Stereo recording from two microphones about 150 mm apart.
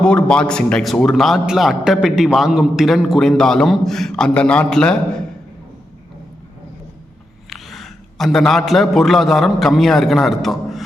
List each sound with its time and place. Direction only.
0.0 s a man's voice: 5° left (ahead or behind)
7.5 s a man's voice: centre (ahead or behind)